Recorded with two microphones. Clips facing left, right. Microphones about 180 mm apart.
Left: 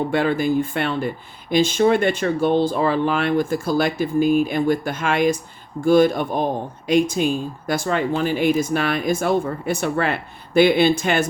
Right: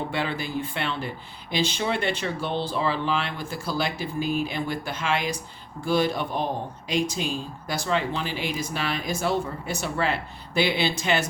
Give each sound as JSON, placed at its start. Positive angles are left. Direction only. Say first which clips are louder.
{"t": 0.1, "sound": "speech", "louder": "left 9 dB", "side_deg": 50}